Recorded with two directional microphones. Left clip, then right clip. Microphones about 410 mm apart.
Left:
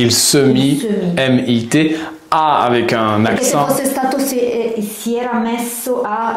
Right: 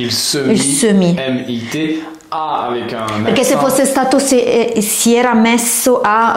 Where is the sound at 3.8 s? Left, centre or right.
Right.